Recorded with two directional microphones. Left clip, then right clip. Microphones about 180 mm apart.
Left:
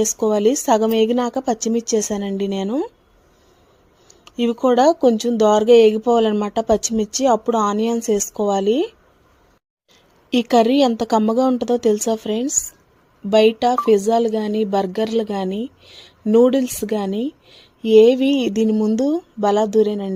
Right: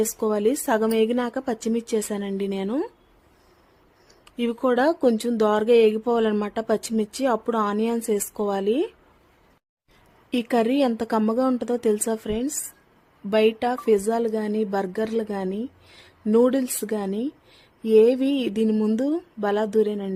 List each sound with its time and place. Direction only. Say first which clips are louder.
0.2 s speech: left 7 dB; 20° left (ahead or behind)
4.1 s speech: left 6 dB; 20° left (ahead or behind)
10.2 s a woman's voice: left 7 dB; 20° left (ahead or behind)